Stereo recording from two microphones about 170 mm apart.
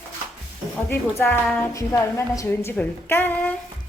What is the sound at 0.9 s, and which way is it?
A woman's voice, 10° left (ahead or behind).